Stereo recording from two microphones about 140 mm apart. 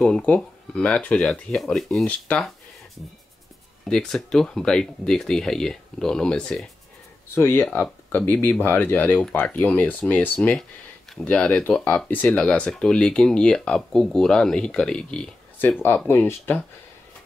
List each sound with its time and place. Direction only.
0.0 s speech: 5° left (ahead or behind)
3.8 s speech: 5° left (ahead or behind)
7.3 s speech: 15° left (ahead or behind)